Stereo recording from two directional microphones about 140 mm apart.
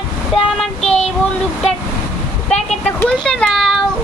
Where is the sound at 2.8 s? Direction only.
10° left (ahead or behind).